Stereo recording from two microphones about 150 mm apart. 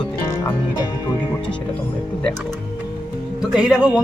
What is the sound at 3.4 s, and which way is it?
Speech, 5° right (ahead or behind).